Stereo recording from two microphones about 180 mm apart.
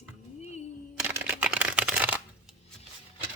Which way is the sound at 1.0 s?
10° right (ahead or behind).